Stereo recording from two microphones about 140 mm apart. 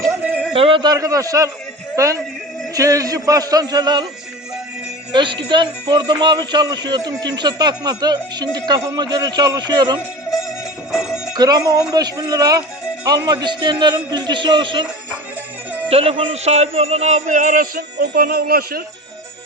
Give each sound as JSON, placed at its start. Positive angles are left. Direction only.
{"t": 0.2, "sound": "a sound", "side_deg": -10}
{"t": 0.5, "sound": "a man's voice", "side_deg": -40}
{"t": 5.1, "sound": "speech", "side_deg": -35}
{"t": 11.3, "sound": "speech", "side_deg": -30}
{"t": 15.9, "sound": "a man's voice", "side_deg": -45}